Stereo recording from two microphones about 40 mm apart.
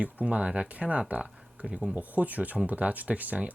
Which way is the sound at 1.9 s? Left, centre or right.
Right.